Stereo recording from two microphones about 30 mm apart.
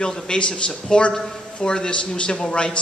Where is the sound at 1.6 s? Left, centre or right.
Left.